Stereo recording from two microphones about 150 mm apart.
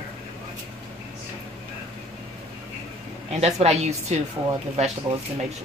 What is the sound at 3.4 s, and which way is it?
Speech, 45° right (ahead or behind).